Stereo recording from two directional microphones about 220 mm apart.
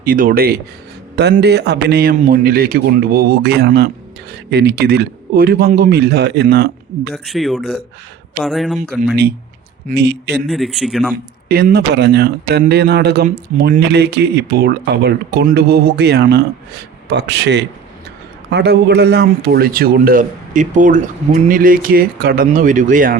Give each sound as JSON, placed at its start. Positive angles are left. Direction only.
{"t": 0.0, "sound": "speech", "side_deg": -40}
{"t": 7.1, "sound": "speech", "side_deg": 0}
{"t": 9.9, "sound": "speech", "side_deg": -50}
{"t": 10.5, "sound": "speech", "side_deg": 0}
{"t": 11.4, "sound": "speech", "side_deg": -40}